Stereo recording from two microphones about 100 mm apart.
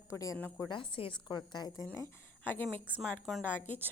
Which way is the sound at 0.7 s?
55° left (ahead or behind).